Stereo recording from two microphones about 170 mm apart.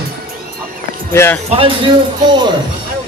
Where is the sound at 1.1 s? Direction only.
15° left (ahead or behind).